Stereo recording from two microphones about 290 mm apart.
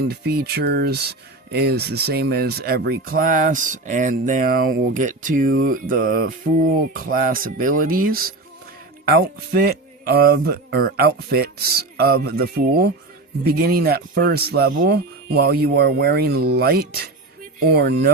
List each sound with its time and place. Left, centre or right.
0.1 s speech: right